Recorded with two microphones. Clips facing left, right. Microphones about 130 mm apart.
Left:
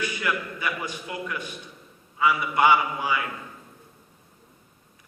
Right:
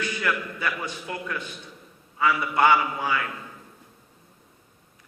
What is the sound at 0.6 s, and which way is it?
A man's voice, 15° left (ahead or behind).